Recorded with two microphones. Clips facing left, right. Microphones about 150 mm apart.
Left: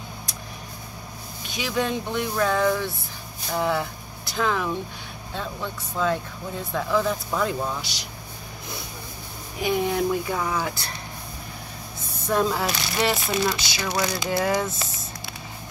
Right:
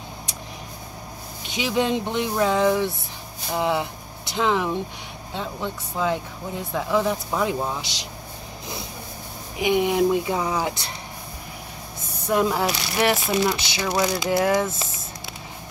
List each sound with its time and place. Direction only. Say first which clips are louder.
1.6 s speech: right 3 dB; 20° right (ahead or behind)
9.6 s speech: right 4 dB; 15° right (ahead or behind)
12.3 s speech: right 2 dB; 15° right (ahead or behind)